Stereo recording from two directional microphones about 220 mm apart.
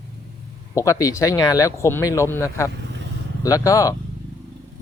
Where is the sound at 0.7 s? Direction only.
15° left (ahead or behind).